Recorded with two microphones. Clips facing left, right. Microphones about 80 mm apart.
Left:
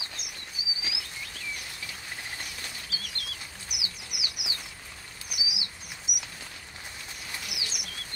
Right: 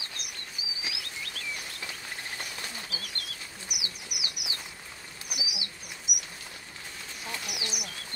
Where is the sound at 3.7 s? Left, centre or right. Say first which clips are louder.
Even; left.